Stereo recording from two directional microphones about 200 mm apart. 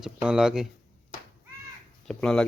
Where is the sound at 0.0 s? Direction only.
5° right (ahead or behind).